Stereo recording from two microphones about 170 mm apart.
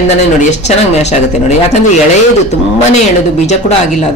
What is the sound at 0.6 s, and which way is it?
Speech, 40° left (ahead or behind).